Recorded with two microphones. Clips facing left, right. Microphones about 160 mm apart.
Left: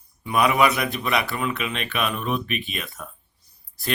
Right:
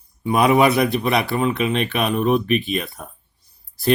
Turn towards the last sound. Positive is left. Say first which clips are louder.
# right 8 dB
turn(degrees=-35)  # may be behind; listen again after turning